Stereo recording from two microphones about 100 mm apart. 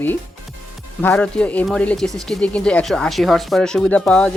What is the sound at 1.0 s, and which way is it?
Speech, 15° left (ahead or behind).